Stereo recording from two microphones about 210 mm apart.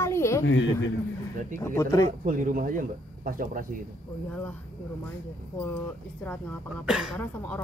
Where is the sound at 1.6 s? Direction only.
10° left (ahead or behind).